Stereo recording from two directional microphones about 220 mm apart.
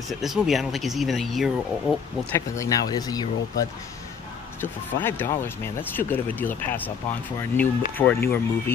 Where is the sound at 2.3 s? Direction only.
15° left (ahead or behind).